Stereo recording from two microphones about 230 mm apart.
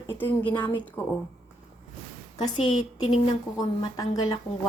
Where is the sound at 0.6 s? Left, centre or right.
Centre.